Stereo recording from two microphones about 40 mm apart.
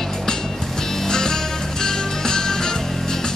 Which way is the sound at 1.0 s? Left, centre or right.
Centre.